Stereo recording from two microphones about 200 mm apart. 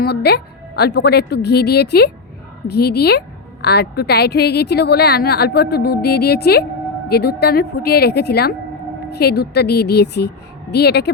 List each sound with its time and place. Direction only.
0.0 s a woman's voice: 55° left (ahead or behind)